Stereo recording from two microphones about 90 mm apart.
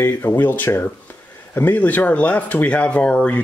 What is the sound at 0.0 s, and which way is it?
Speech, 25° left (ahead or behind).